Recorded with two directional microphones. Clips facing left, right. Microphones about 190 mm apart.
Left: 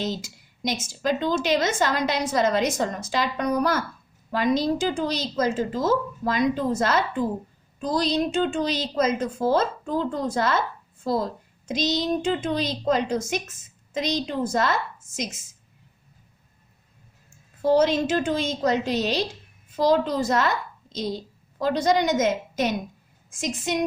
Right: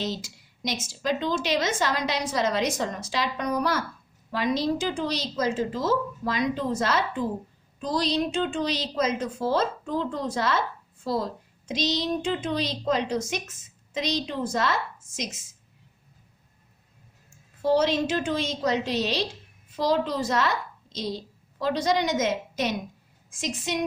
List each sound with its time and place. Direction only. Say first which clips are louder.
0.0 s a woman's voice: left 2 dB; 50° left (ahead or behind)
17.6 s a woman's voice: left 3 dB; 50° left (ahead or behind)